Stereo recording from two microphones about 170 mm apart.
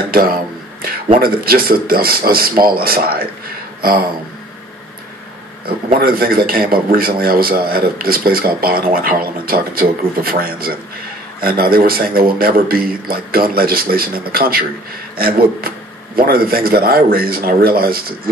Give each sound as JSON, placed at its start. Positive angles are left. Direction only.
{"t": 0.1, "sound": "a man's voice", "side_deg": -60}
{"t": 5.9, "sound": "a man's voice", "side_deg": -60}